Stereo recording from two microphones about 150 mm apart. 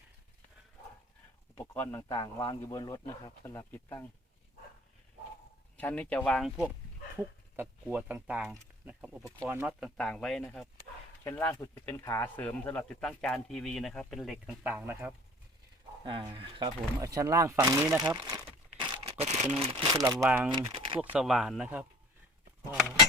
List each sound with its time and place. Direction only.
1.5 s speech: 15° left (ahead or behind)
5.7 s speech: 10° left (ahead or behind)
7.2 s speech: 15° right (ahead or behind); by 10.7 s 5° left (ahead or behind)
11.2 s speech: 15° left (ahead or behind); by 15.1 s 10° right (ahead or behind)
16.0 s speech: 35° right (ahead or behind)
18.7 s a sound: 35° right (ahead or behind)
19.4 s speech: 45° right (ahead or behind); by 20.1 s 25° right (ahead or behind)
20.2 s speech: 10° right (ahead or behind)
20.6 s speech: 35° right (ahead or behind)
21.0 s speech: 5° right (ahead or behind)